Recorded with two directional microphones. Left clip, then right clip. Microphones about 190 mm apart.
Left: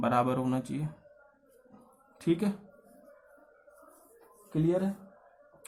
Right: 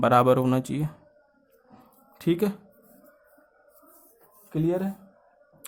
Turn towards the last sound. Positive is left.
turn(degrees=-45)  # may be behind; listen again after turning